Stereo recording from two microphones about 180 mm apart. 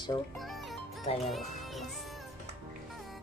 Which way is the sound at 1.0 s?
35° left (ahead or behind).